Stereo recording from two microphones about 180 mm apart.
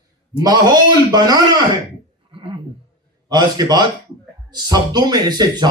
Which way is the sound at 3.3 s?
20° right (ahead or behind).